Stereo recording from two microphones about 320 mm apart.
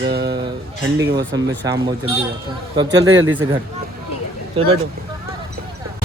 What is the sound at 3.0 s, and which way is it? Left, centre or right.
Mantra, right.